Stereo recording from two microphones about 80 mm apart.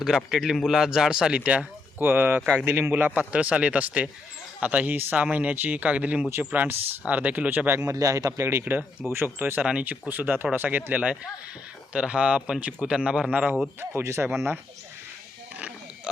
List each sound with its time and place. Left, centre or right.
0.3 s speech: centre; by 7.7 s right
7.8 s speech: right; by 13.6 s centre
13.9 s speech: right